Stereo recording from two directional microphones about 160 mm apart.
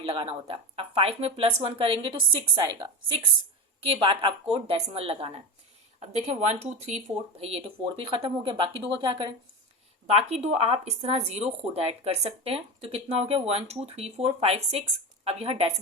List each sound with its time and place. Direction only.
0.0 s speech: 35° right (ahead or behind)
10.2 s speech: 40° right (ahead or behind)